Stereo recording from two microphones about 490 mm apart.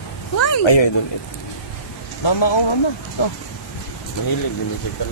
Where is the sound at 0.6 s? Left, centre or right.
Left.